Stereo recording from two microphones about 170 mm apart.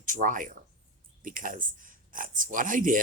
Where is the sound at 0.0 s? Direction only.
50° right (ahead or behind).